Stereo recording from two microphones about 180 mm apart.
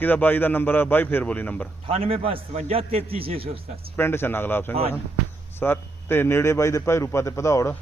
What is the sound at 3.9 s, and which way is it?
A man's voice, 15° left (ahead or behind).